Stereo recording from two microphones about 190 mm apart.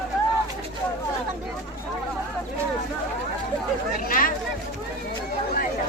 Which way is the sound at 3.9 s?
45° left (ahead or behind).